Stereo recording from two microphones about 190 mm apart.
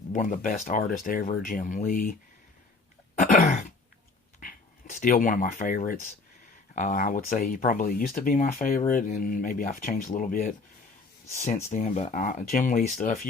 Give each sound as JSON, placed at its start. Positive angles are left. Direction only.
{"t": 0.1, "sound": "speech", "side_deg": 40}
{"t": 3.2, "sound": "throat clearing", "side_deg": 40}
{"t": 4.4, "sound": "speech", "side_deg": 45}